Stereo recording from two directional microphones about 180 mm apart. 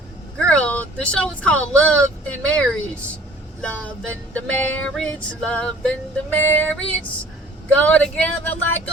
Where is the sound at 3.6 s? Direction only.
5° left (ahead or behind).